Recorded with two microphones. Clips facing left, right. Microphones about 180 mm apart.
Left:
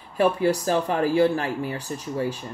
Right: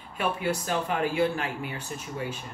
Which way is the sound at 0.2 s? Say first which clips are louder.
Left 8 dB; 35° left (ahead or behind).